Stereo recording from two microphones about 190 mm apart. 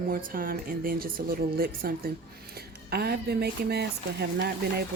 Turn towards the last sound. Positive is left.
turn(degrees=-60)  # may be behind; listen again after turning